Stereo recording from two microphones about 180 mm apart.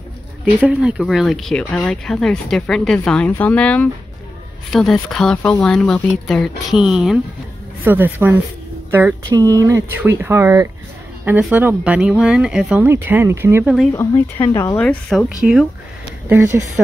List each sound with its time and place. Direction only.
0.6 s speech: 5° right (ahead or behind)
5.1 s speech: 5° left (ahead or behind); by 13.7 s 15° right (ahead or behind)
13.9 s speech: 15° left (ahead or behind); by 16.6 s 15° right (ahead or behind)